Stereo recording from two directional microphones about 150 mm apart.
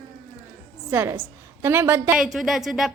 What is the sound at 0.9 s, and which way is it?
A woman's voice, 15° right (ahead or behind).